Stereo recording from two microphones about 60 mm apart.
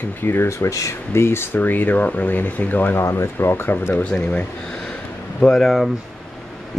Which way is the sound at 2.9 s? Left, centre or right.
Left.